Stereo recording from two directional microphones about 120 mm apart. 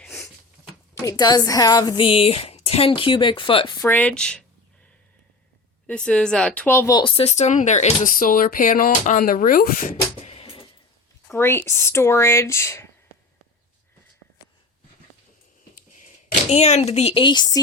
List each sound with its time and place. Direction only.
0.0 s a sound: centre (ahead or behind)
1.0 s a woman's voice: 35° left (ahead or behind)
2.0 s speech: 50° left (ahead or behind)
3.8 s speech: 15° left (ahead or behind)
5.9 s speech: 10° left (ahead or behind)
7.0 s speech: 60° left (ahead or behind); by 9.2 s 90° left
9.7 s beatboxing: 75° left (ahead or behind); by 10.7 s 55° left (ahead or behind)
11.3 s speech: 20° left (ahead or behind)
16.0 s a sound: 90° left; by 17.2 s 60° left (ahead or behind)
17.2 s a woman's voice: 40° left (ahead or behind)